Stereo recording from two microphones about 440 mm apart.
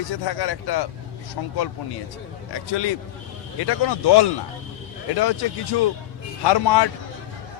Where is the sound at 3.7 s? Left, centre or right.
Left.